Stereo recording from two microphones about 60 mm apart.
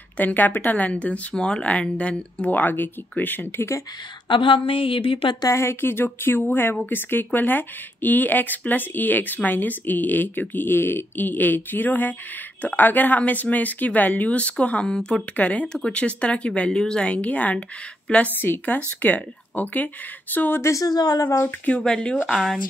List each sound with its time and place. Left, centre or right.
0.2 s speech: left
2.5 s speech: left
3.5 s speech: left
5.5 s speech: left; by 15.2 s centre
15.3 s speech: left
18.4 s speech: left
20.6 s speech: left
21.6 s speech: centre